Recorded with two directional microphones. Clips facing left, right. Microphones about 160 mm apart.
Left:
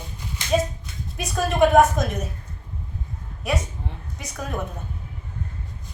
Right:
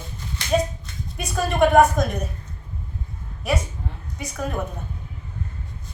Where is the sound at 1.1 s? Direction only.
Centre (ahead or behind).